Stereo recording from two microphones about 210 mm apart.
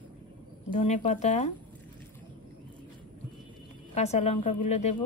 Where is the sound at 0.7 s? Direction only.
35° left (ahead or behind).